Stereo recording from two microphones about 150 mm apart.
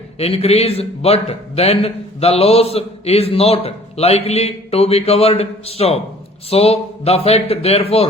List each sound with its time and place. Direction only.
0.2 s a man's voice: 40° left (ahead or behind)